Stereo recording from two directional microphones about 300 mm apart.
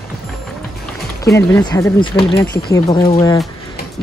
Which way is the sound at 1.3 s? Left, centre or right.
Centre.